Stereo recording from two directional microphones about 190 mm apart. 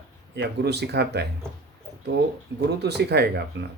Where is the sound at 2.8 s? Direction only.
60° right (ahead or behind).